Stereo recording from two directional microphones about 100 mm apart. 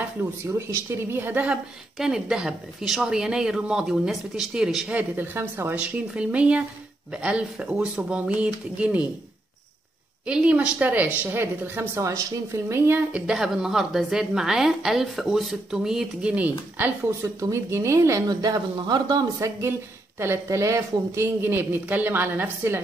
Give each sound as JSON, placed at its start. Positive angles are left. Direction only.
{"t": 0.2, "sound": "a woman's voice", "side_deg": -25}
{"t": 1.5, "sound": "speech", "side_deg": -5}
{"t": 10.2, "sound": "a woman's voice", "side_deg": -10}
{"t": 13.1, "sound": "a woman's voice", "side_deg": -5}
{"t": 17.4, "sound": "speech", "side_deg": -30}
{"t": 20.2, "sound": "a woman's voice", "side_deg": -25}